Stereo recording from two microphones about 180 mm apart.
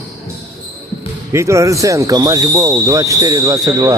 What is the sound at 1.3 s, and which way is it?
Speech, 15° right (ahead or behind).